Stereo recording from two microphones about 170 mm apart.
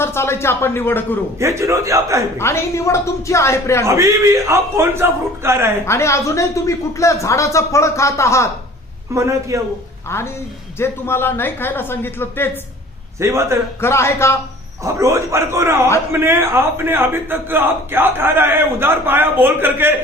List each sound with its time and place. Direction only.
0.0 s speech: 15° left (ahead or behind)
1.4 s a man's voice: 15° right (ahead or behind)
2.4 s speech: 15° left (ahead or behind)
3.8 s a man's voice: 20° right (ahead or behind)
5.8 s speech: 15° left (ahead or behind)
9.1 s a man's voice: 20° right (ahead or behind)
10.8 s speech: 15° left (ahead or behind)
13.1 s a man's voice: 15° right (ahead or behind)
13.8 s speech: 15° left (ahead or behind)
14.8 s a man's voice: 15° right (ahead or behind)